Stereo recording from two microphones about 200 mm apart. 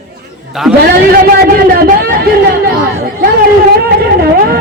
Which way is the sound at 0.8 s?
50° right (ahead or behind).